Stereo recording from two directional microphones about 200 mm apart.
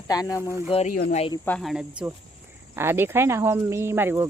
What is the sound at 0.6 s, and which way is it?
Speech, 35° left (ahead or behind).